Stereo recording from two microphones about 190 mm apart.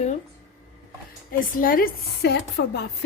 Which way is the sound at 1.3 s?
50° left (ahead or behind).